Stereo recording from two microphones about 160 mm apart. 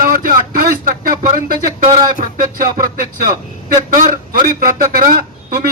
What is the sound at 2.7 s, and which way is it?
A man's voice, 60° right (ahead or behind).